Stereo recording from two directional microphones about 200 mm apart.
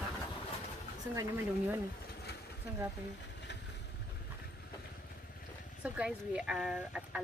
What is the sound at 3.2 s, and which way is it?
Vehicle, 60° left (ahead or behind).